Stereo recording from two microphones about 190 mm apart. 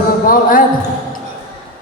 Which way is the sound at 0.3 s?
45° left (ahead or behind).